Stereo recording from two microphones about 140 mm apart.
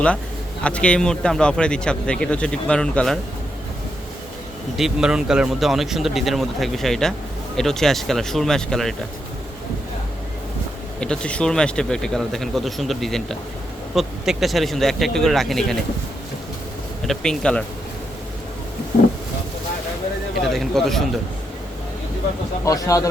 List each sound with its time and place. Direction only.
0.6 s speech: 10° left (ahead or behind)
4.8 s speech: 5° right (ahead or behind)
11.0 s speech: 5° left (ahead or behind)
17.1 s speech: 5° left (ahead or behind)
20.5 s speech: centre (ahead or behind)
22.6 s speech: 25° left (ahead or behind)